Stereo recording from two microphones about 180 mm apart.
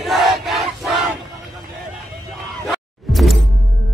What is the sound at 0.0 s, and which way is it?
Battle cry, centre (ahead or behind).